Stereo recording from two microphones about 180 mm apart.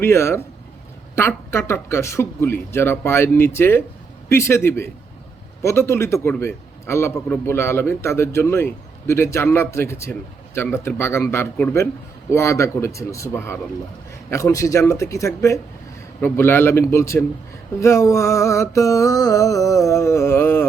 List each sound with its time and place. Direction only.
0.0 s a man's voice: 15° left (ahead or behind)